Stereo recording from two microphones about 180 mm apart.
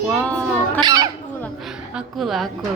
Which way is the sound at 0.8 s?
20° right (ahead or behind).